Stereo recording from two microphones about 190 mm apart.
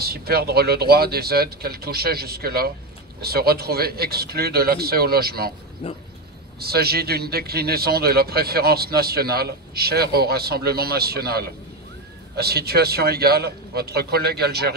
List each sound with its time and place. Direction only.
0.0 s a man's voice: 55° right (ahead or behind)
5.8 s speech: 30° left (ahead or behind)
6.6 s a man's voice: 55° right (ahead or behind)